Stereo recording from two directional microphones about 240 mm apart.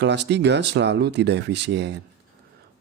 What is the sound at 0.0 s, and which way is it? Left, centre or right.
Speech, right.